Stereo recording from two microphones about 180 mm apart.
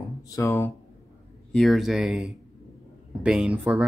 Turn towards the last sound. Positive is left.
turn(degrees=-5)  # may be behind; listen again after turning